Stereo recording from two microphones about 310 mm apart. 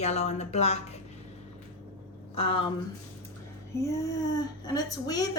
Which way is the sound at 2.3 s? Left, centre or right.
Centre.